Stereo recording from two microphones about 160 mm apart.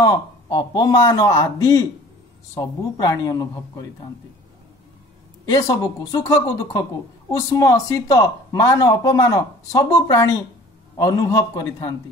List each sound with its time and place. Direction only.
0.0 s speech: 25° left (ahead or behind)
5.4 s speech: 25° left (ahead or behind)